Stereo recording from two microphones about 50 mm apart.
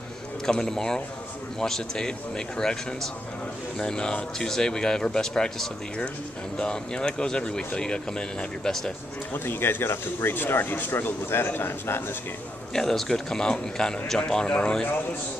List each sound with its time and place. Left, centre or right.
0.5 s speech: centre
9.3 s speech: left
12.7 s a man's voice: centre